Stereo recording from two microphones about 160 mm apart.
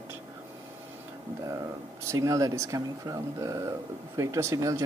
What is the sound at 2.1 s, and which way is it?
Speech, 20° right (ahead or behind).